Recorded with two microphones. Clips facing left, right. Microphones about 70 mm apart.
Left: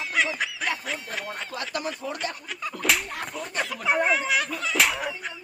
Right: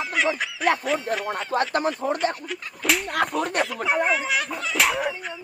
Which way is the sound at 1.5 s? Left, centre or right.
Right.